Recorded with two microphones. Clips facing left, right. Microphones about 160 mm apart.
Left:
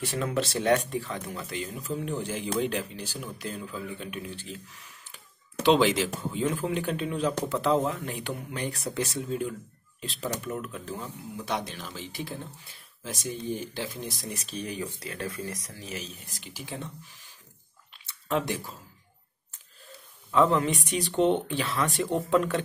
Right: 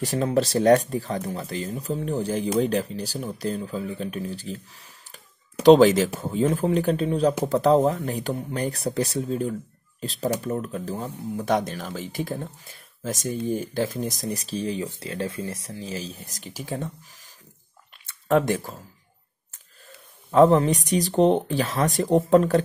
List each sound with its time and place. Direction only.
0.0 s speech: 40° right (ahead or behind)
20.2 s speech: 40° right (ahead or behind)